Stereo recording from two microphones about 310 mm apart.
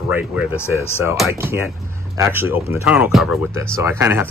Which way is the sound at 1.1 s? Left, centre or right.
Centre.